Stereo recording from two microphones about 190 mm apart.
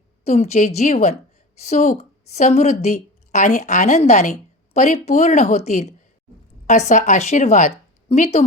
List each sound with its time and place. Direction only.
0.3 s a woman's voice: 35° left (ahead or behind)